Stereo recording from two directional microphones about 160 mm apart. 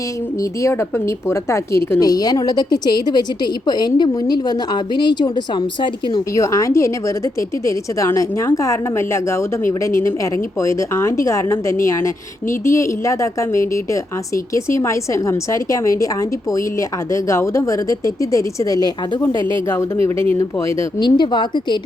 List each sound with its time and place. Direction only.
0.6 s a woman's voice: 15° left (ahead or behind)
17.1 s a woman's voice: 20° left (ahead or behind)